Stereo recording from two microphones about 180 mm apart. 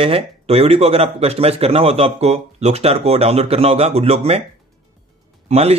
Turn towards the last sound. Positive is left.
turn(degrees=-35)  # may be behind; listen again after turning